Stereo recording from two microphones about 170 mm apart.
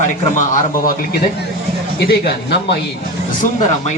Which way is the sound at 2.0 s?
75° left (ahead or behind).